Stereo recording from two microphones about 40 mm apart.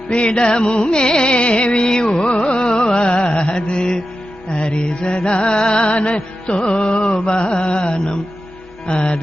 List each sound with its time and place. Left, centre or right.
0.1 s music: left